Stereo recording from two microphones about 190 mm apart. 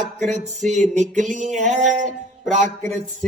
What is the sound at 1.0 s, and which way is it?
Music, 40° right (ahead or behind).